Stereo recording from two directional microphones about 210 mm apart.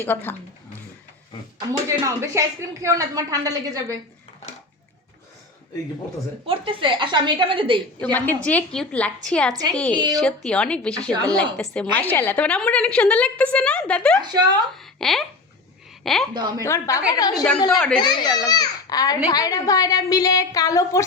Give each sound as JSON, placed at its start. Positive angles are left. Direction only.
{"t": 0.0, "sound": "a woman's voice", "side_deg": 10}
{"t": 1.9, "sound": "a woman's voice", "side_deg": -15}
{"t": 6.4, "sound": "a woman's voice", "side_deg": -25}
{"t": 8.0, "sound": "a woman's voice", "side_deg": 10}
{"t": 14.2, "sound": "a woman's voice", "side_deg": -20}
{"t": 14.8, "sound": "a woman's voice", "side_deg": 0}
{"t": 16.3, "sound": "a woman's voice", "side_deg": -20}
{"t": 16.6, "sound": "a woman's voice", "side_deg": 15}
{"t": 17.7, "sound": "a woman's voice", "side_deg": 5}
{"t": 18.0, "sound": "a woman's voice", "side_deg": 20}